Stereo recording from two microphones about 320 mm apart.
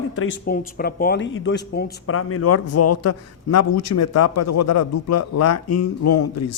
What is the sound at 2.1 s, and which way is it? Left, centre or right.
A man's voice, left.